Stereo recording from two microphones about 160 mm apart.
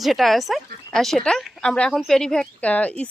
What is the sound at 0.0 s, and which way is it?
Speech, centre (ahead or behind).